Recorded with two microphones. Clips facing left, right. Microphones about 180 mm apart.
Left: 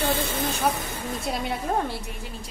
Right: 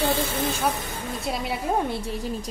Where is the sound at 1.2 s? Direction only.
Centre (ahead or behind).